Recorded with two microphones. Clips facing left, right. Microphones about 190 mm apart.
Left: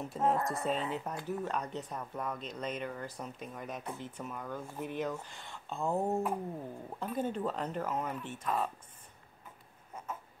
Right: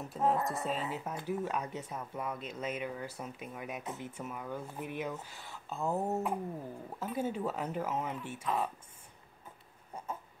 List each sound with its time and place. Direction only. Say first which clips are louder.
0.1 s speech: right 1 dB; centre (ahead or behind)
3.8 s speech: even; 20° right (ahead or behind)
4.2 s speech: right 1 dB; 5° right (ahead or behind)